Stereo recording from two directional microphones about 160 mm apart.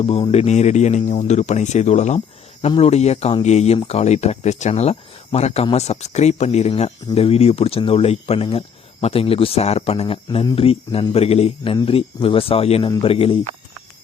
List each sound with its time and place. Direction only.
0.0 s speech: 35° left (ahead or behind)